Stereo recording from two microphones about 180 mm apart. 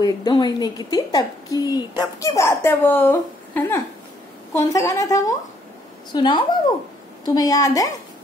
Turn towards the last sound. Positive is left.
turn(degrees=20)  # may be behind; listen again after turning